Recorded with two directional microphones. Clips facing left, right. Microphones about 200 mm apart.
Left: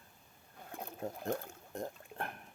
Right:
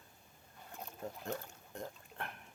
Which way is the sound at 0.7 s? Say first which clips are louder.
Left 4 dB; 55° left (ahead or behind).